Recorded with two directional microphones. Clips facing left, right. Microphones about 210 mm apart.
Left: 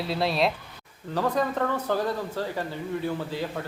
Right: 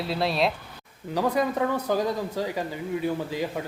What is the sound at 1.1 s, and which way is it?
Speech, 10° right (ahead or behind).